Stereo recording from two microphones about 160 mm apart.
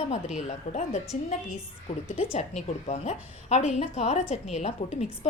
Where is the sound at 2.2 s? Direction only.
45° left (ahead or behind).